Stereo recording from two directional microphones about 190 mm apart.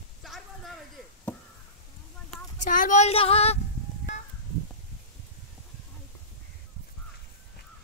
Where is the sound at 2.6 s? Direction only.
40° left (ahead or behind).